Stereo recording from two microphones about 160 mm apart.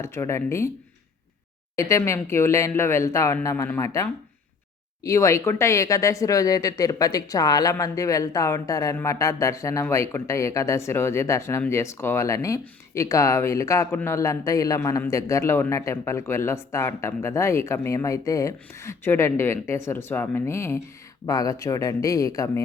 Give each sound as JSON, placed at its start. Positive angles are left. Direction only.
{"t": 0.0, "sound": "speech", "side_deg": 15}
{"t": 1.7, "sound": "speech", "side_deg": 20}